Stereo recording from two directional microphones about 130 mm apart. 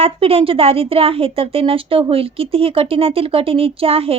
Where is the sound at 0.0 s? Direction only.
50° right (ahead or behind).